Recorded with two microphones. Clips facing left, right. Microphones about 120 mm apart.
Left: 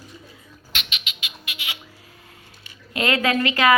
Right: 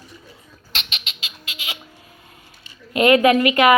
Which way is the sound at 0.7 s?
35° right (ahead or behind).